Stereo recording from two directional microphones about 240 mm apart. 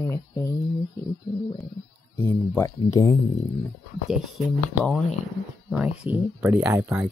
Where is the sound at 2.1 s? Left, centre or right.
Centre.